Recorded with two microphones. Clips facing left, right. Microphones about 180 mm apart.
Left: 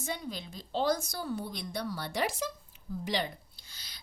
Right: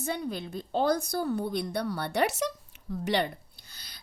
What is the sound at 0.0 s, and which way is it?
A woman's voice, 60° right (ahead or behind).